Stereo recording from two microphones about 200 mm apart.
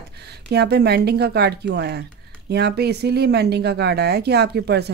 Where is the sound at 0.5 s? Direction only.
55° right (ahead or behind).